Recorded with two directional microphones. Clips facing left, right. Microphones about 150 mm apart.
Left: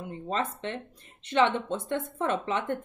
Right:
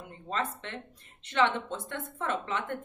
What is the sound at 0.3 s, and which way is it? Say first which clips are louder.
A woman's voice: left 3 dB; 20° left (ahead or behind).